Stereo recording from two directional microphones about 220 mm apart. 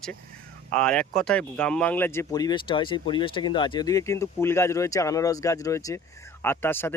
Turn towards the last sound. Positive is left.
turn(degrees=10)  # may be behind; listen again after turning